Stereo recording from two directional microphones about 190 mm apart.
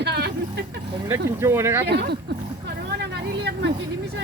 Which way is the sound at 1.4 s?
15° right (ahead or behind).